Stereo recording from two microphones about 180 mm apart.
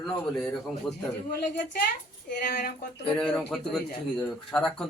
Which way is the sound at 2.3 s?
45° left (ahead or behind).